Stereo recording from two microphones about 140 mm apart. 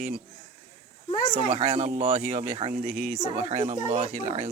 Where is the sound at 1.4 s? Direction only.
45° right (ahead or behind).